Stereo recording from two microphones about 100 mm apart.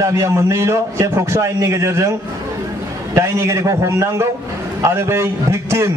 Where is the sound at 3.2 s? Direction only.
30° right (ahead or behind).